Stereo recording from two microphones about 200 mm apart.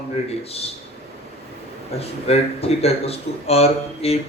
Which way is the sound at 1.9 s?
30° left (ahead or behind).